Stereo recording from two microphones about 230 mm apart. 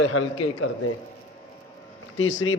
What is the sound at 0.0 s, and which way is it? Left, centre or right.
Speech, left.